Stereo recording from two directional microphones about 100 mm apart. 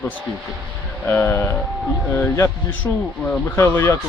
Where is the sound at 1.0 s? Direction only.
20° left (ahead or behind).